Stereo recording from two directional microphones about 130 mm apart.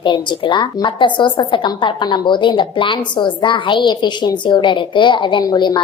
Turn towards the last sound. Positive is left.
turn(degrees=35)  # may be behind; listen again after turning